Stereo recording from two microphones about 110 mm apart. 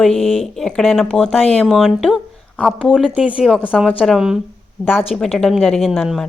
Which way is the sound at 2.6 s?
10° left (ahead or behind).